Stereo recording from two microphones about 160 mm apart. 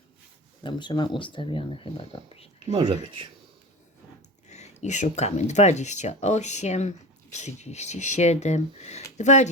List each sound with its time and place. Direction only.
0.6 s speech: 30° left (ahead or behind)
2.7 s speech: 30° right (ahead or behind)
4.4 s speech: 45° left (ahead or behind)